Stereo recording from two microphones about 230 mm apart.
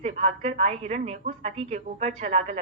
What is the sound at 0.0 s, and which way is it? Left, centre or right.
A woman's voice, right.